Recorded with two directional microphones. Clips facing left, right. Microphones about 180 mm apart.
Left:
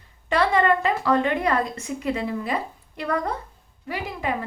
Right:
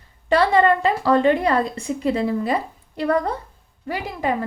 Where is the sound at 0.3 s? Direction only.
35° right (ahead or behind).